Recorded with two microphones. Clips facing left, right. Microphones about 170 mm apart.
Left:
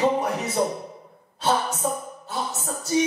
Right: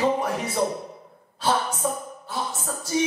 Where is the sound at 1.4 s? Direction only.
25° left (ahead or behind).